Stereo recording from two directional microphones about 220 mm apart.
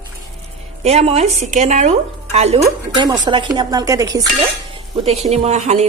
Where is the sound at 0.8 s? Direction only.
30° right (ahead or behind).